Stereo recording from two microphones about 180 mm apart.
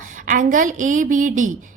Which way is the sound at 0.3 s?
45° right (ahead or behind).